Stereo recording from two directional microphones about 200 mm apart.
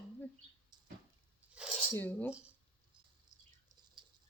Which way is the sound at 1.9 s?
10° left (ahead or behind).